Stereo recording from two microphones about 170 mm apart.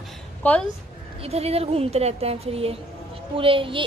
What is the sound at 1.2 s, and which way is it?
A woman's voice, 35° right (ahead or behind).